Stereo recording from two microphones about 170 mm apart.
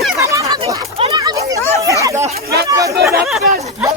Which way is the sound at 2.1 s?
20° right (ahead or behind).